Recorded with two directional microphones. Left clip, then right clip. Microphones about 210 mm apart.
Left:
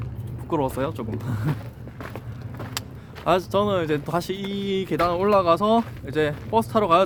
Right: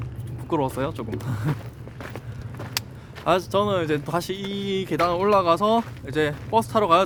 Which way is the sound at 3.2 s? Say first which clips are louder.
Even; 5° right (ahead or behind).